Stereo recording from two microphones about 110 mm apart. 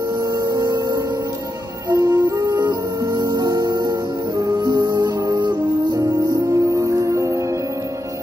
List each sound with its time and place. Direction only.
0.2 s music: 40° right (ahead or behind)